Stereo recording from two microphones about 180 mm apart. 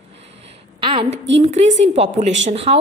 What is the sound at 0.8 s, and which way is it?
A woman's voice, 30° right (ahead or behind).